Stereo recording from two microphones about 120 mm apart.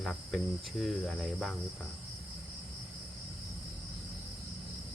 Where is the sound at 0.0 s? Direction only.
Centre (ahead or behind).